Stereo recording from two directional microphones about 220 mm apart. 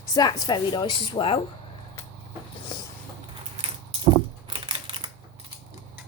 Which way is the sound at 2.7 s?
20° left (ahead or behind).